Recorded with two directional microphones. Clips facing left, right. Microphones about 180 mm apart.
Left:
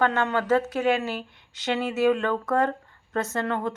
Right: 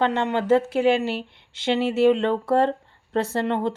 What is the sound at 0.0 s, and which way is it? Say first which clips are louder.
Speech: right 2 dB; 25° right (ahead or behind).